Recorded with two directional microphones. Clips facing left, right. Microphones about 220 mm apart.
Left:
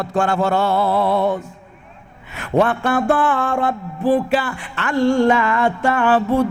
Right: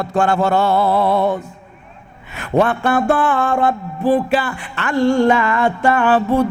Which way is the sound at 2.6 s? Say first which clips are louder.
Right 1 dB; 15° right (ahead or behind).